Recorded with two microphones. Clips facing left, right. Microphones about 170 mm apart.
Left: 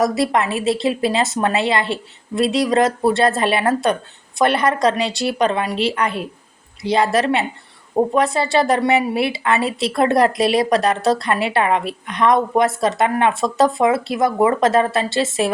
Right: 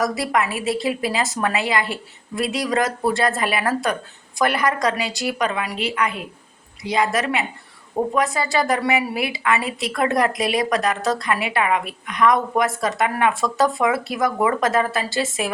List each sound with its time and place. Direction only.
0.0 s a woman's voice: 25° left (ahead or behind)